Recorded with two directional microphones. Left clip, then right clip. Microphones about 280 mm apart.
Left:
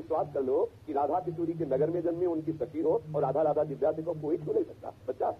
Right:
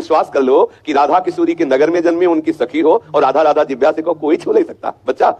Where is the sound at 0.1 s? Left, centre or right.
Right.